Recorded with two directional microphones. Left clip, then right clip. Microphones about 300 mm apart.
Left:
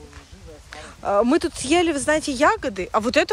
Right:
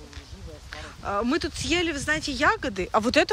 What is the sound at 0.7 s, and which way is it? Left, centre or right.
Speech, centre.